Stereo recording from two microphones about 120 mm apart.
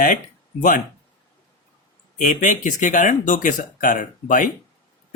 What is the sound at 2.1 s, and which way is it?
Speech, 90° left.